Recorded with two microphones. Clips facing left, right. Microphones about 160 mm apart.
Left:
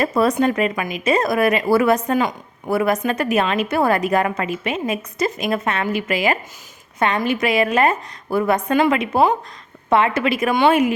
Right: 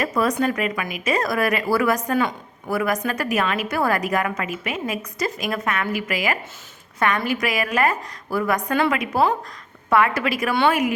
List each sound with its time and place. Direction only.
0.0 s a woman's voice: 30° left (ahead or behind)